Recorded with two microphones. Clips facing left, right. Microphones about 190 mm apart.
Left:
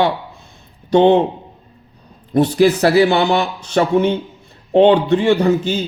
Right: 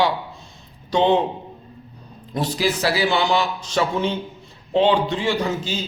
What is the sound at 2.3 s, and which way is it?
Speech, 60° left (ahead or behind).